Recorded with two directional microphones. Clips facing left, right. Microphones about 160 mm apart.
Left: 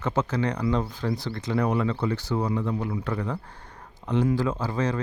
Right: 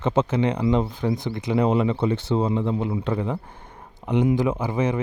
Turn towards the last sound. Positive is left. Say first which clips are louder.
# right 3 dB
turn(degrees=-15)  # may be behind; listen again after turning